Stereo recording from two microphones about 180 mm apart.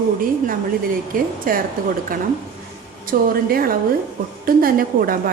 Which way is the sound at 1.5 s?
50° right (ahead or behind).